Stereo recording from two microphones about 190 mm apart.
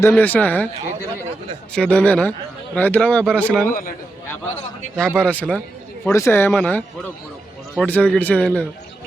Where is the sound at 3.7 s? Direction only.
45° left (ahead or behind).